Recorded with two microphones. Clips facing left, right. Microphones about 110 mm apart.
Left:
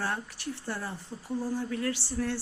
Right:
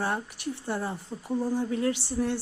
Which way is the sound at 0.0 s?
15° right (ahead or behind).